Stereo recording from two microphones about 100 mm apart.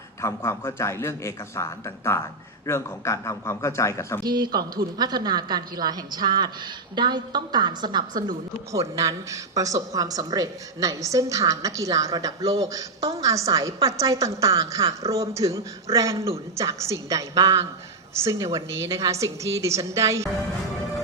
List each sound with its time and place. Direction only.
0.2 s a man's voice: 30° left (ahead or behind)
4.2 s a woman's voice: 45° right (ahead or behind)